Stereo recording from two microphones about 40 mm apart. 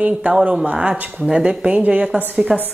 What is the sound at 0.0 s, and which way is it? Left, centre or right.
A woman's voice, right.